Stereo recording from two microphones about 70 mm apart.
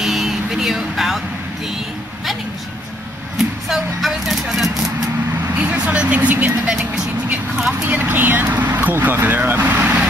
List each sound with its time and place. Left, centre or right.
0.0 s a sound: centre
3.6 s vehicle: centre
5.6 s speech: centre
7.9 s speech: right